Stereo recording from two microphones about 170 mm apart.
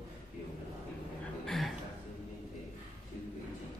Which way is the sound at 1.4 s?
Centre (ahead or behind).